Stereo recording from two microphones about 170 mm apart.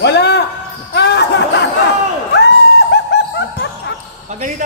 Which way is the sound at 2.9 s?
90° left.